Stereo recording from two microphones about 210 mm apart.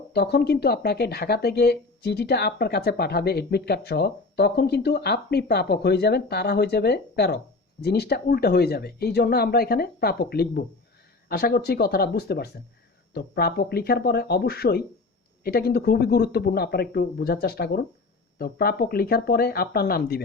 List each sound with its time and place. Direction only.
0.1 s speech: 50° left (ahead or behind)